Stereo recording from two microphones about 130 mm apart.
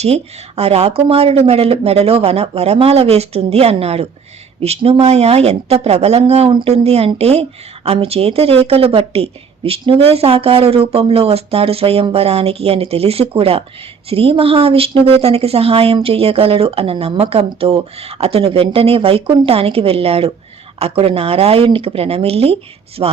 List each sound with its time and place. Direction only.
0.0 s speech: 55° right (ahead or behind)